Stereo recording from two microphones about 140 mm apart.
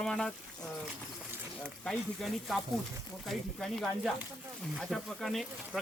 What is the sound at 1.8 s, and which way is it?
Speech, 5° left (ahead or behind).